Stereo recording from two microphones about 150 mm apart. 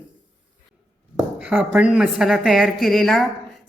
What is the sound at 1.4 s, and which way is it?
Speech, 10° right (ahead or behind).